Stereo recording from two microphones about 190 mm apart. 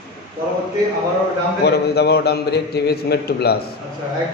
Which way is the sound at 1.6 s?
60° left (ahead or behind).